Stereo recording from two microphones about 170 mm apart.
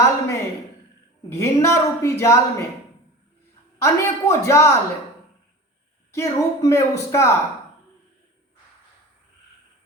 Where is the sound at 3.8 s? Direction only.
15° left (ahead or behind).